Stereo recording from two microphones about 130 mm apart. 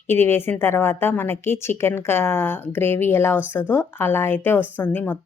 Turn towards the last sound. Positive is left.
turn(degrees=15)  # may be behind; listen again after turning